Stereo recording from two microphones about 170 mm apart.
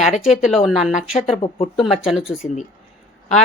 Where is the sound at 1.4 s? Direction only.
35° left (ahead or behind).